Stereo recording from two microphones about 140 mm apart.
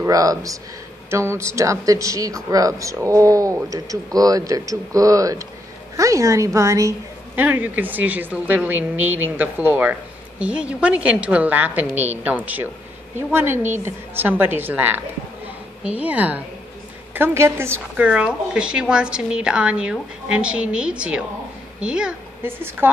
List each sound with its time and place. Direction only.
0.0 s a woman's voice: 25° right (ahead or behind)